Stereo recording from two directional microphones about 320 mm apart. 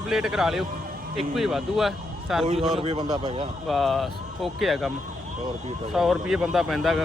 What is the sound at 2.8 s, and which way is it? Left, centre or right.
Speech, centre.